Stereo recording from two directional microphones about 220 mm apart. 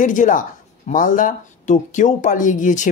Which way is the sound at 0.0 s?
35° left (ahead or behind).